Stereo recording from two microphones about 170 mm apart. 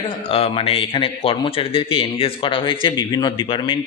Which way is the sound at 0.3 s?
35° left (ahead or behind).